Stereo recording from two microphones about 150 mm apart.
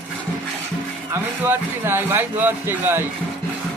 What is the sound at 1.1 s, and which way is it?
Speech, 15° right (ahead or behind).